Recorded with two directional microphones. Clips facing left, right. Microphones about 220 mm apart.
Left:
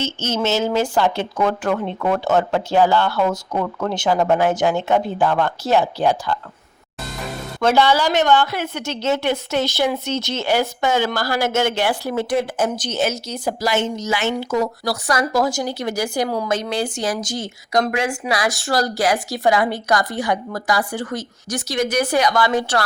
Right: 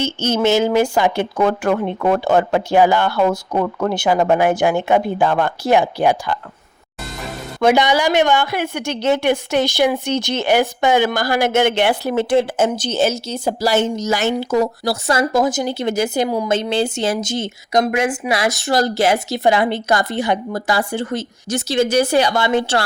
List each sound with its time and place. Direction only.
0.0 s speech: 10° right (ahead or behind)
7.6 s speech: 15° right (ahead or behind)